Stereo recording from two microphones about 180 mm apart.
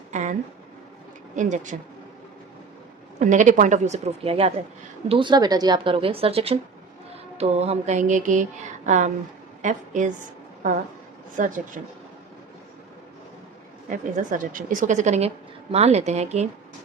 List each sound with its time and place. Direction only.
0.1 s a sound: 45° right (ahead or behind)
1.4 s a woman's voice: 40° right (ahead or behind)
3.2 s a woman's voice: 45° right (ahead or behind)
11.3 s a woman's voice: 45° right (ahead or behind)
13.9 s a woman's voice: 45° right (ahead or behind)